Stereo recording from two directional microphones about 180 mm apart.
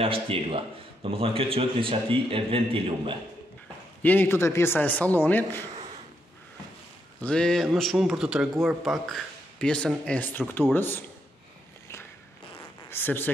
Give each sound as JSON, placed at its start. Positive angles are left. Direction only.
{"t": 0.0, "sound": "a man's voice", "side_deg": -30}
{"t": 4.0, "sound": "a man's voice", "side_deg": 10}
{"t": 7.2, "sound": "a man's voice", "side_deg": 5}
{"t": 12.9, "sound": "a man's voice", "side_deg": 10}